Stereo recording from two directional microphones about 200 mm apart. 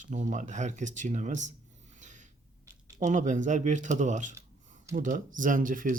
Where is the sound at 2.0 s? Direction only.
40° right (ahead or behind).